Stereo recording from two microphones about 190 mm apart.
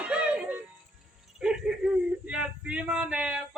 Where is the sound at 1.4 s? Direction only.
5° right (ahead or behind).